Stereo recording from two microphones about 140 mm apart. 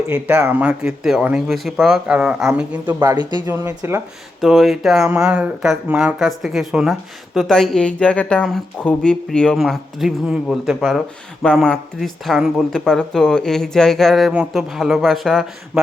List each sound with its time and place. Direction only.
0.1 s speech: 10° right (ahead or behind)
3.2 s speech: 30° right (ahead or behind)
3.5 s speech: 20° right (ahead or behind)
4.4 s speech: centre (ahead or behind)